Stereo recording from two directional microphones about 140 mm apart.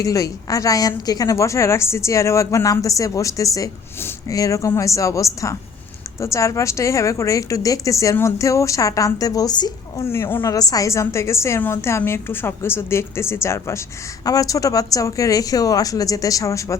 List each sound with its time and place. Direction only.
0.0 s a woman's voice: 25° left (ahead or behind)
10.1 s a woman's voice: 15° left (ahead or behind)